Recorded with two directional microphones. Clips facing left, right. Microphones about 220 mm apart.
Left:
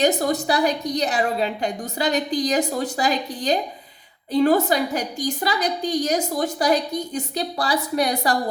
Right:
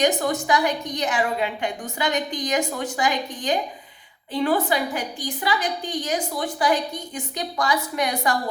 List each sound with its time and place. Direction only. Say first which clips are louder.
0.0 s a woman's voice: left 2 dB; 35° left (ahead or behind)